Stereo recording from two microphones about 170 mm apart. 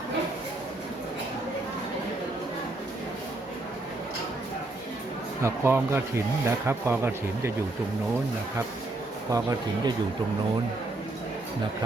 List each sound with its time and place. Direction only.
5.4 s speech: 15° right (ahead or behind)
9.3 s speech: 20° right (ahead or behind)